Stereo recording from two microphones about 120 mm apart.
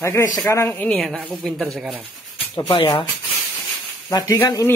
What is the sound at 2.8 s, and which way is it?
Speech, 45° left (ahead or behind).